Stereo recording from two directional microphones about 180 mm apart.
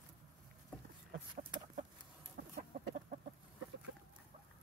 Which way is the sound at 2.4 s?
75° right (ahead or behind).